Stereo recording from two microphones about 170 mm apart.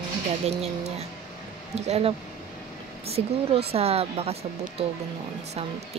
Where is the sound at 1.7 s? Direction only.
40° right (ahead or behind).